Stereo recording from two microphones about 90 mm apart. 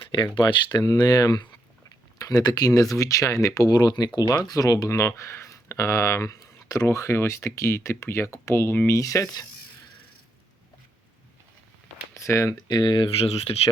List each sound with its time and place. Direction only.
0.1 s speech: 55° left (ahead or behind); by 9.0 s 25° left (ahead or behind)
9.0 s speech: 35° left (ahead or behind)
12.1 s speech: 30° left (ahead or behind)
12.6 s speech: 55° left (ahead or behind); by 13.3 s 75° left (ahead or behind)